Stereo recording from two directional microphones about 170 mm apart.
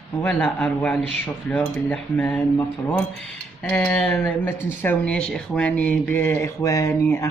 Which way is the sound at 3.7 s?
5° left (ahead or behind).